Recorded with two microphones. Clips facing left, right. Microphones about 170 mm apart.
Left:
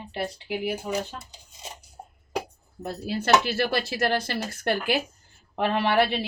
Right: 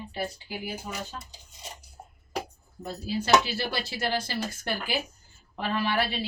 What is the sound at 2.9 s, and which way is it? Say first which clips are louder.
Speech: left 1 dB; 60° left (ahead or behind).